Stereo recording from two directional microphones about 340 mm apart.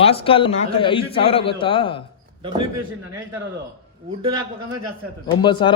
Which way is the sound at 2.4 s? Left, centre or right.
Centre.